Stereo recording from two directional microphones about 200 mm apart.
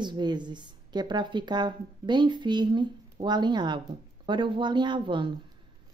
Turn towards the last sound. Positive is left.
turn(degrees=-25)  # may be behind; listen again after turning